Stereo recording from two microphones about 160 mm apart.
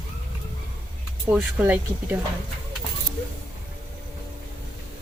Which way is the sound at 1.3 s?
10° right (ahead or behind).